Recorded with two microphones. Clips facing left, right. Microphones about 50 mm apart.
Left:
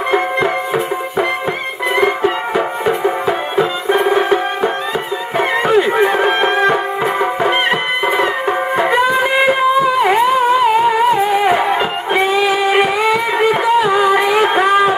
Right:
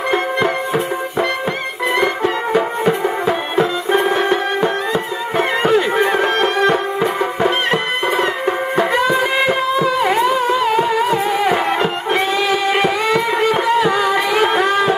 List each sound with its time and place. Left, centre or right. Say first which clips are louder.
0.4 s music: left 1 dB; centre